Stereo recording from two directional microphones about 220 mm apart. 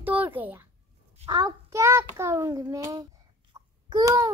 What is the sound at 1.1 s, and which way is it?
Child singing, 20° right (ahead or behind).